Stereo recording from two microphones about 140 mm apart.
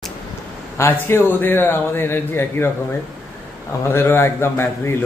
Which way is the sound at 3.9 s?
15° left (ahead or behind).